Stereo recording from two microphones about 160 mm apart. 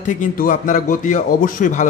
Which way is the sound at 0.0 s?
55° left (ahead or behind).